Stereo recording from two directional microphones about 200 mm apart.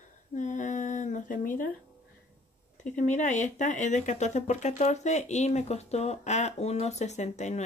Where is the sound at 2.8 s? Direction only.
40° left (ahead or behind).